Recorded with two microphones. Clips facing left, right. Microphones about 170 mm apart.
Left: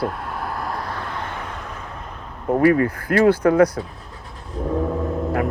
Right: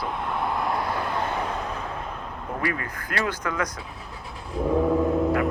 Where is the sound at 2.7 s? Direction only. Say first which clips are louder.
Left 13 dB; 35° left (ahead or behind).